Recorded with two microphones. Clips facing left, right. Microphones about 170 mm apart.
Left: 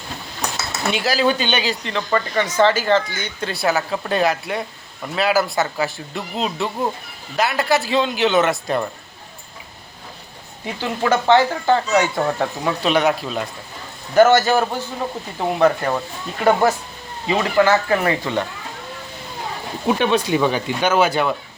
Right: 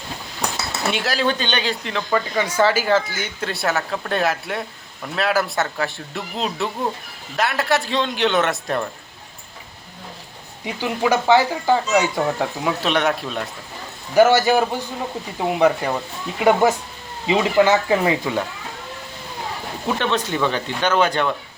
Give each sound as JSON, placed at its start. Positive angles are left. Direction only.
{"t": 0.9, "sound": "speech", "side_deg": 0}
{"t": 10.8, "sound": "speech", "side_deg": -10}
{"t": 14.2, "sound": "speech", "side_deg": -10}
{"t": 19.9, "sound": "speech", "side_deg": 10}